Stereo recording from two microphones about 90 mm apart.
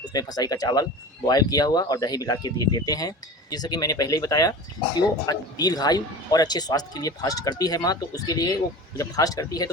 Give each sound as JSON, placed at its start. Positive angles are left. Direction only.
{"t": 0.1, "sound": "speech", "side_deg": 45}